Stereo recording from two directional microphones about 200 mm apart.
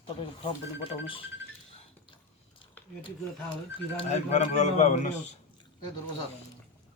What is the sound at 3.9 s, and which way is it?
Speech, 35° left (ahead or behind).